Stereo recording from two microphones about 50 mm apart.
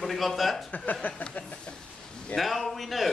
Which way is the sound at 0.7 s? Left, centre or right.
Left.